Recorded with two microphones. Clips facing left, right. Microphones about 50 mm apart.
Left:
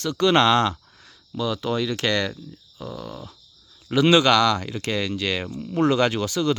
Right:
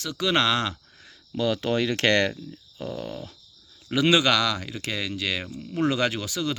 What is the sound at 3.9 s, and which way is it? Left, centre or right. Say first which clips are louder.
Speech: left 4 dB; centre.